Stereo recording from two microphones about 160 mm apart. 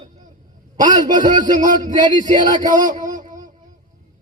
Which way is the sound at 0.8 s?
55° right (ahead or behind).